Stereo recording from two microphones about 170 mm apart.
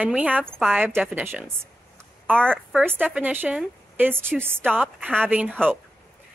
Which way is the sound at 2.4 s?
5° left (ahead or behind).